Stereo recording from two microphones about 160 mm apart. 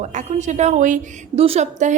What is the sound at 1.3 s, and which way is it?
Speech, 40° right (ahead or behind).